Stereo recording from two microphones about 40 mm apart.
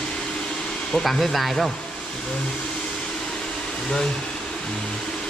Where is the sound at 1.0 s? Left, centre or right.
Centre.